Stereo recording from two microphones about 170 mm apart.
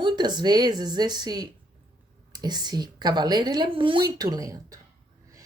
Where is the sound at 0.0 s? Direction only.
25° right (ahead or behind).